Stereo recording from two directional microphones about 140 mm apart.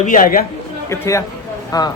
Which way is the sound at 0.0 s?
75° left (ahead or behind).